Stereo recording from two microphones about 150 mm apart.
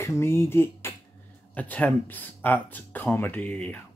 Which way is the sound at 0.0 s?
20° left (ahead or behind).